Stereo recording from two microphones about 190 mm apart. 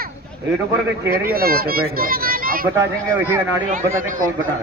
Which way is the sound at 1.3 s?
50° right (ahead or behind).